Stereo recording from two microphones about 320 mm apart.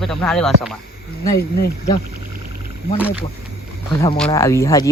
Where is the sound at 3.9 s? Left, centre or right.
Centre.